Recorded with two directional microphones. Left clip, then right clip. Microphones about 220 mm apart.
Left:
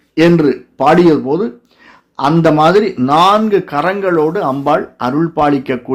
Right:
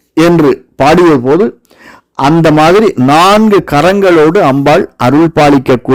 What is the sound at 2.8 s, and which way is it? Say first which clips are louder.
A man's voice: right 4 dB; 50° right (ahead or behind).